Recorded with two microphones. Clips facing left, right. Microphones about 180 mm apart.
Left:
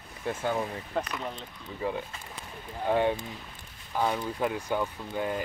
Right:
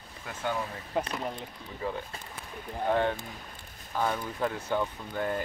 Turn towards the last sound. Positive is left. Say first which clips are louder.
# even
turn(degrees=10)  # may be behind; listen again after turning